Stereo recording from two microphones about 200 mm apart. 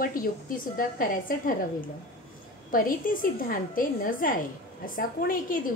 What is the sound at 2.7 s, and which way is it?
A woman's voice, 45° left (ahead or behind).